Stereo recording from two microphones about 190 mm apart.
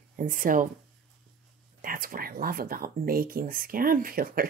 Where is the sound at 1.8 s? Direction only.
45° right (ahead or behind).